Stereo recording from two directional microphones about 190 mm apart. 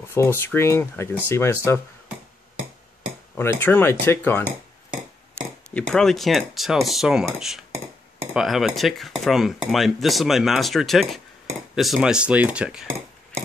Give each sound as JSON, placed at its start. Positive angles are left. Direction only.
{"t": 0.1, "sound": "speech", "side_deg": 10}
{"t": 3.3, "sound": "speech", "side_deg": 10}
{"t": 5.8, "sound": "cutlery", "side_deg": 0}
{"t": 7.7, "sound": "a sound", "side_deg": -15}
{"t": 8.4, "sound": "cutlery", "side_deg": 0}